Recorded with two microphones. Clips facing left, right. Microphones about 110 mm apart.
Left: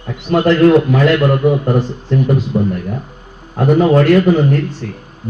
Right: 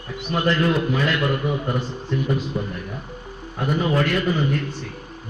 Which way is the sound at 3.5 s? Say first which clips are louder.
Left 11 dB; 65° left (ahead or behind).